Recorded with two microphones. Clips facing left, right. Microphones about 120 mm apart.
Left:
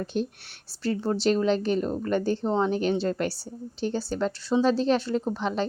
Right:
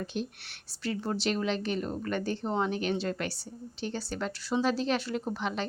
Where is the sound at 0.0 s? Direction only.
35° left (ahead or behind).